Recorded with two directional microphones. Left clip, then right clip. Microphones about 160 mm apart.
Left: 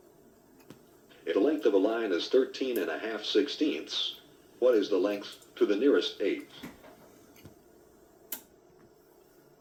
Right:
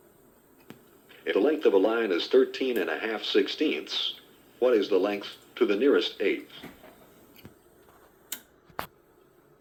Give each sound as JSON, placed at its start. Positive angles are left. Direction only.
{"t": 1.2, "sound": "speech", "side_deg": -90}